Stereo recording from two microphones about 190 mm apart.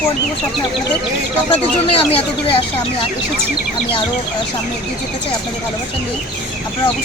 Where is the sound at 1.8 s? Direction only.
30° left (ahead or behind).